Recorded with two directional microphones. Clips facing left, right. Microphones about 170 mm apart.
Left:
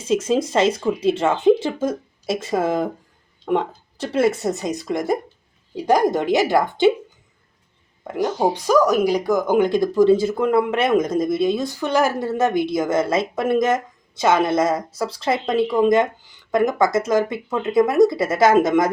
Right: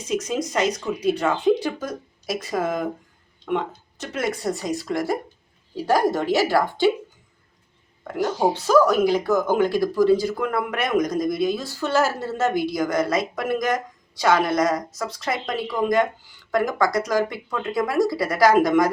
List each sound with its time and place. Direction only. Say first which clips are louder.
0.0 s speech: left 6 dB; 30° left (ahead or behind)
3.4 s a sound: left 4 dB; centre (ahead or behind)
3.9 s speech: left 8 dB; 30° left (ahead or behind)
8.0 s speech: left 2 dB; 20° left (ahead or behind)